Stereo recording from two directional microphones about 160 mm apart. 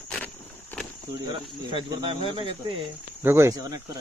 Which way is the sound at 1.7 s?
30° right (ahead or behind).